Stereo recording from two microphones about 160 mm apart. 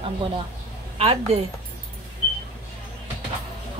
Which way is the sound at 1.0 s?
40° right (ahead or behind).